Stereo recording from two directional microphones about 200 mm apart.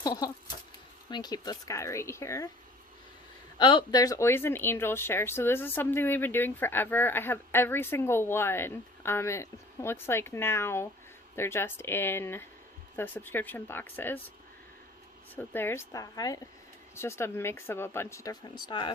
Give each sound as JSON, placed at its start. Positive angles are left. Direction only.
{"t": 0.0, "sound": "speech", "side_deg": 20}
{"t": 3.6, "sound": "speech", "side_deg": 25}
{"t": 15.4, "sound": "speech", "side_deg": 10}